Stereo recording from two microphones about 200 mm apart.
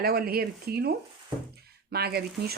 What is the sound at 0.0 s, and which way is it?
Speech, 50° right (ahead or behind).